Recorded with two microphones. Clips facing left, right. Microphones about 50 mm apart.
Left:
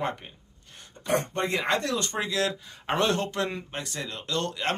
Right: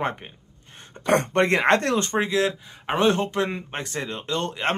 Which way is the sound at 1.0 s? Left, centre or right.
Right.